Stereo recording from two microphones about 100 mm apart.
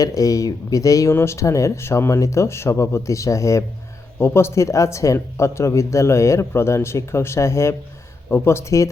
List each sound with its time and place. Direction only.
0.0 s speech: 35° left (ahead or behind)